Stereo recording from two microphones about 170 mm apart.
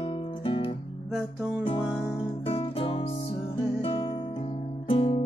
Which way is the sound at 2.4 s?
35° left (ahead or behind).